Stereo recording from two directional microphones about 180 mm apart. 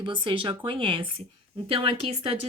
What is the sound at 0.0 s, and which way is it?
A woman's voice, 30° right (ahead or behind).